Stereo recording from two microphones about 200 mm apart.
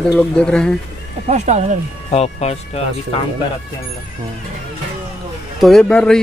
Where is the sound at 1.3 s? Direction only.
35° right (ahead or behind).